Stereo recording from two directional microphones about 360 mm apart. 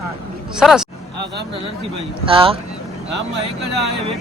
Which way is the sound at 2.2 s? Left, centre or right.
Centre.